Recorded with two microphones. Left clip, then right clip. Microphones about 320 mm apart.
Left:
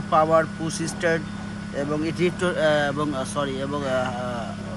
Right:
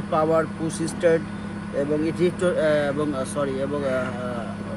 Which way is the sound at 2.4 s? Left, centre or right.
Left.